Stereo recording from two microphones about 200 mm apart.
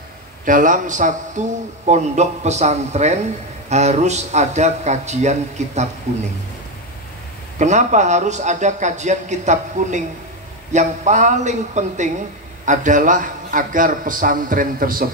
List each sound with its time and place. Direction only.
0.5 s a man's voice: 40° right (ahead or behind)
7.5 s a man's voice: 35° right (ahead or behind)